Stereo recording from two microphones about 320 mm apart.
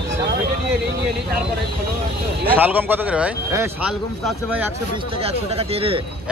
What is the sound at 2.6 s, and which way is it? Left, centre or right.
Speech, centre.